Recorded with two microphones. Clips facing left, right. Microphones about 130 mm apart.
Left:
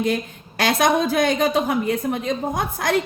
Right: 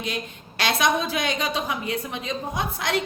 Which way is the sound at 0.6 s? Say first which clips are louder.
Left 4 dB; 50° left (ahead or behind).